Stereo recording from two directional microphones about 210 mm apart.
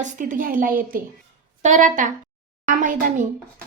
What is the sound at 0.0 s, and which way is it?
A woman's voice, 40° right (ahead or behind).